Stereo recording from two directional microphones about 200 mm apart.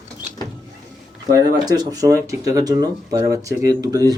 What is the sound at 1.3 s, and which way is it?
Speech, 20° right (ahead or behind).